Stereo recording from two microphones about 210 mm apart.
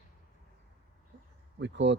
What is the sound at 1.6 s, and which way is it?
Speech, 55° right (ahead or behind).